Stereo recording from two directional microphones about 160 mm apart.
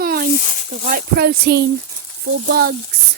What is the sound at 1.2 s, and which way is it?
Speech, 80° right.